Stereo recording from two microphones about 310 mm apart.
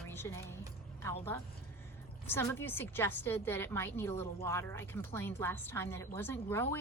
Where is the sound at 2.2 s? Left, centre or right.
Centre.